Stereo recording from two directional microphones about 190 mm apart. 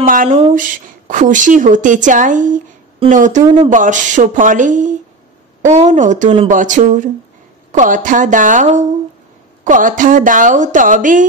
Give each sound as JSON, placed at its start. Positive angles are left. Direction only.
{"t": 0.0, "sound": "a woman's voice", "side_deg": -45}